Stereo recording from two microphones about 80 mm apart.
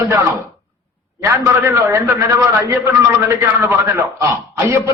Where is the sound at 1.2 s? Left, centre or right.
Right.